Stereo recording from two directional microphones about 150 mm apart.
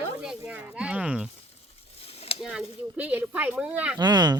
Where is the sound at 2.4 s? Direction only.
5° right (ahead or behind).